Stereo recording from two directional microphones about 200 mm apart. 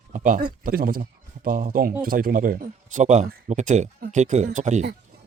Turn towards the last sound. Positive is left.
turn(degrees=-35)  # may be behind; listen again after turning